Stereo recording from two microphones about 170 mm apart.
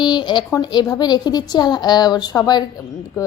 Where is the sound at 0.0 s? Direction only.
25° left (ahead or behind).